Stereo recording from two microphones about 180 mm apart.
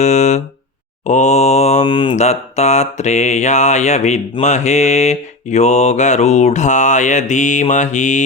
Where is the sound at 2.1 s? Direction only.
40° left (ahead or behind).